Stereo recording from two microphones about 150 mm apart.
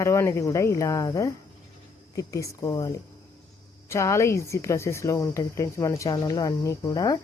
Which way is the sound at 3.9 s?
20° left (ahead or behind).